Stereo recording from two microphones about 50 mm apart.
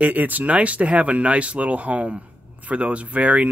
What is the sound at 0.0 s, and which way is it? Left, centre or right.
Speech, right.